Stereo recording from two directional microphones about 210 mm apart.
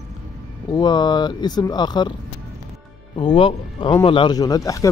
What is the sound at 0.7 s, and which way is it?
Speech, 20° left (ahead or behind).